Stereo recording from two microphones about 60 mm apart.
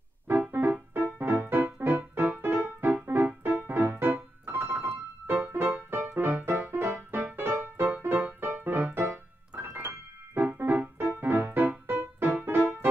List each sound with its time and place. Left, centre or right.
0.3 s music: right
9.5 s keyboard: right
11.1 s music: right